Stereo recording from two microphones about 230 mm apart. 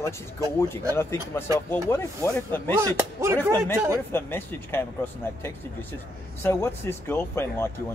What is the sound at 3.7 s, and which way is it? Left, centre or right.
Speech, centre.